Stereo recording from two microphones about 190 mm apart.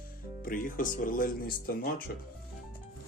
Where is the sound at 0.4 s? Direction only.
45° left (ahead or behind).